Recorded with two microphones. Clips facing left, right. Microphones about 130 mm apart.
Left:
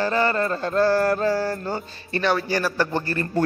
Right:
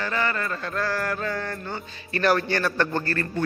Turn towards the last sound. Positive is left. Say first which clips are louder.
# left 1 dB
turn(degrees=15)  # may be behind; listen again after turning